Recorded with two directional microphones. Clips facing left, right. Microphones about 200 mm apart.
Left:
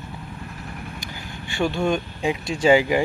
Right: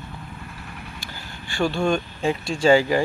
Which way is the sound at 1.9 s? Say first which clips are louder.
Right 1 dB; 15° left (ahead or behind).